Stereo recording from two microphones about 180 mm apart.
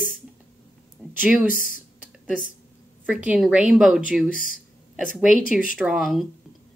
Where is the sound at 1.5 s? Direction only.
50° left (ahead or behind).